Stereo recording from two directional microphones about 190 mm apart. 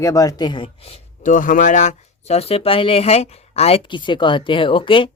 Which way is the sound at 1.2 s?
45° left (ahead or behind).